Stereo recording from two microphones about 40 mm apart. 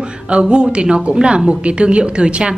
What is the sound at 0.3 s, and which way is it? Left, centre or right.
A woman's voice, right.